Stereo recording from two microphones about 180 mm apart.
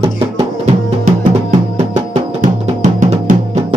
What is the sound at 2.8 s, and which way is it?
Music, 45° right (ahead or behind).